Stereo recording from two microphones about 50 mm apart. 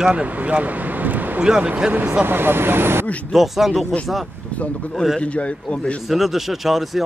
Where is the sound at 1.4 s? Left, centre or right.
Centre.